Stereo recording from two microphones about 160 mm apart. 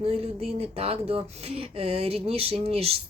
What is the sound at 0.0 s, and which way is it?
Speech, 40° right (ahead or behind).